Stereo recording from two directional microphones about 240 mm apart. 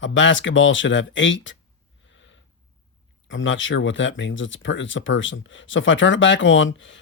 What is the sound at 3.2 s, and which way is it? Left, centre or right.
Speech, left.